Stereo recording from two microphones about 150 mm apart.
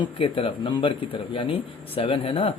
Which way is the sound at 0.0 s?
35° left (ahead or behind).